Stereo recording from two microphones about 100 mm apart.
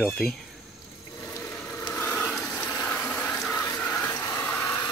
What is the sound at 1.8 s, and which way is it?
Rub, 15° left (ahead or behind).